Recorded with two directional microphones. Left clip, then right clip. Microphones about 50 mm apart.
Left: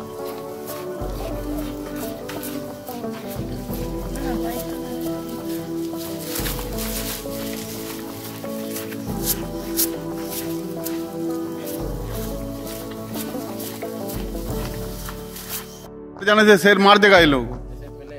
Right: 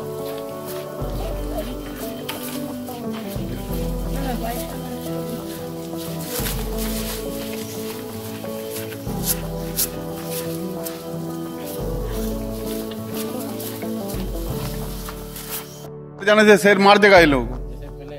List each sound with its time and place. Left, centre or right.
9.2 s music: left
16.3 s a man's voice: left